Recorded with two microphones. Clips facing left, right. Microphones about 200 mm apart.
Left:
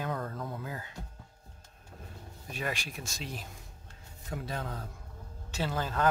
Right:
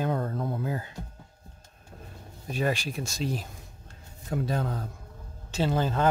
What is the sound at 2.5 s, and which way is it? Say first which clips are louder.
Speech: right 8 dB; 35° right (ahead or behind).